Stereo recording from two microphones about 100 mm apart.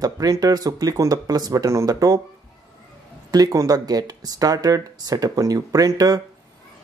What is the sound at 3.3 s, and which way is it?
Speech, 35° right (ahead or behind).